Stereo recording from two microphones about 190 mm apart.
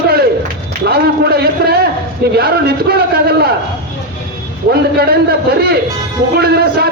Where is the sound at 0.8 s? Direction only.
55° right (ahead or behind).